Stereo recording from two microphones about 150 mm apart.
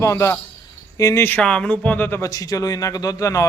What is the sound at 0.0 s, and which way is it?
A man's voice, 20° left (ahead or behind).